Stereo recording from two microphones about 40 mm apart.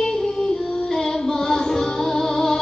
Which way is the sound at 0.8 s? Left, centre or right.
Centre.